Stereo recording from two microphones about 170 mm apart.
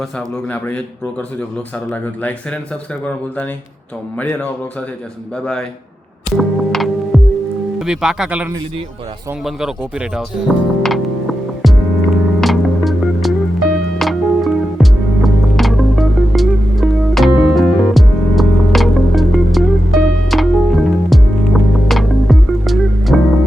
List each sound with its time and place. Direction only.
4.2 s speech: 10° left (ahead or behind)
6.3 s music: centre (ahead or behind)
7.8 s speech: 5° right (ahead or behind)
10.8 s music: centre (ahead or behind)